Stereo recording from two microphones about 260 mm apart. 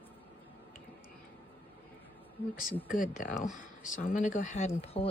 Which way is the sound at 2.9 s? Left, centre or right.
Left.